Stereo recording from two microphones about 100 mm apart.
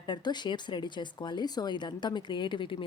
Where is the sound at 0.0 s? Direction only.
45° left (ahead or behind).